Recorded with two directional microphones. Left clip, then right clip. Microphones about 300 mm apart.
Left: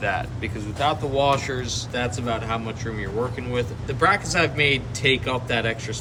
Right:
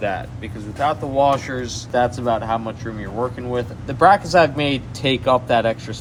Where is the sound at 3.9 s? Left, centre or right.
Centre.